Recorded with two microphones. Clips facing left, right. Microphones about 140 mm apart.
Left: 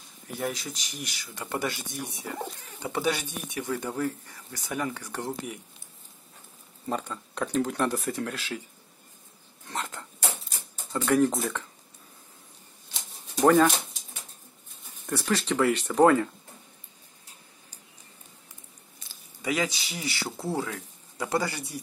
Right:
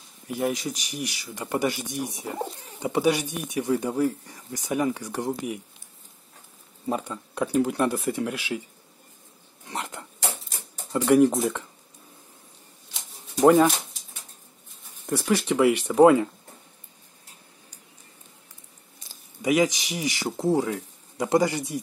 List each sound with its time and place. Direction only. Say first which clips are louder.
0.3 s speech: right 6 dB; 15° right (ahead or behind)
6.9 s speech: right 3 dB; 10° right (ahead or behind)
9.7 s dog: right 1 dB; 15° right (ahead or behind)
10.9 s speech: right 5 dB; 15° right (ahead or behind)
13.4 s speech: right 3 dB; 15° right (ahead or behind)
15.0 s speech: right 4 dB; 15° right (ahead or behind)
19.4 s speech: right 7 dB; 15° right (ahead or behind)